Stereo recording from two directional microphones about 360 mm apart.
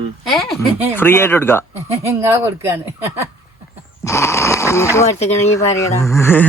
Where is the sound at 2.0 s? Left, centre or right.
Centre.